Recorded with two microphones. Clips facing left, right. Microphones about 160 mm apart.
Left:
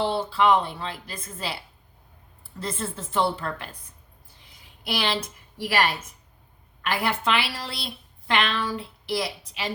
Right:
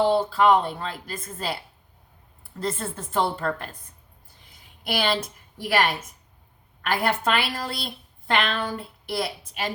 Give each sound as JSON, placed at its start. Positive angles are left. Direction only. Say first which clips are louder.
{"t": 0.0, "sound": "a woman's voice", "louder": "right 3 dB", "side_deg": -45}
{"t": 2.6, "sound": "a woman's voice", "louder": "right 2 dB", "side_deg": -45}
{"t": 4.8, "sound": "a woman's voice", "louder": "right 2 dB", "side_deg": -50}
{"t": 6.8, "sound": "a woman's voice", "louder": "right 2 dB", "side_deg": -50}